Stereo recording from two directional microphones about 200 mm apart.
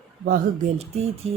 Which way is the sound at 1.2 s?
30° right (ahead or behind).